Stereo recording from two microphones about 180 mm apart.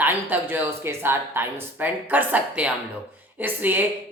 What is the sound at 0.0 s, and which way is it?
Speech, 10° right (ahead or behind).